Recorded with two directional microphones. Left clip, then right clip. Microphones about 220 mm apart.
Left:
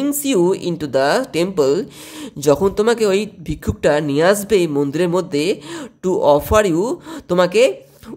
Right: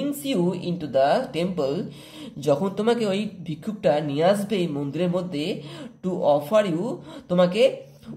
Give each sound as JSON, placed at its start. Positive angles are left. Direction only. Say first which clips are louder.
{"t": 0.0, "sound": "speech", "louder": "left 9 dB", "side_deg": 50}